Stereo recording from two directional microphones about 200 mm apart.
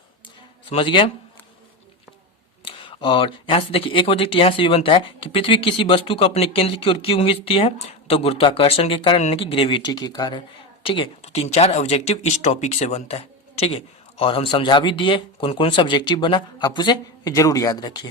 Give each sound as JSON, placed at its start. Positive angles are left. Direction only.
{"t": 0.7, "sound": "speech", "side_deg": 25}
{"t": 2.6, "sound": "speech", "side_deg": 25}